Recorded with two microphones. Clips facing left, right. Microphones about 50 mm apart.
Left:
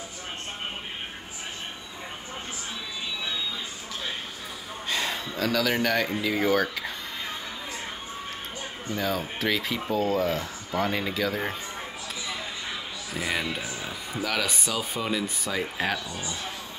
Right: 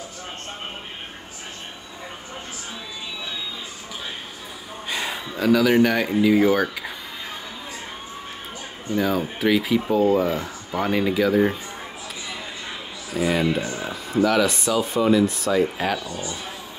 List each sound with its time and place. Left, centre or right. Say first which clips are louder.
4.8 s speech: right 1 dB; centre
8.9 s speech: right 6 dB; centre
13.1 s speech: right 8 dB; centre
16.1 s speech: right 4 dB; left